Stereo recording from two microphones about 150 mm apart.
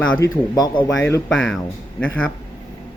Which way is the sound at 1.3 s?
Centre (ahead or behind).